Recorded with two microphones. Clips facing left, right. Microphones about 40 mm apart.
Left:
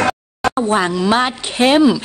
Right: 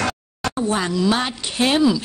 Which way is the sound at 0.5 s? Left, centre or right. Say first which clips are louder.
Left 4 dB; left.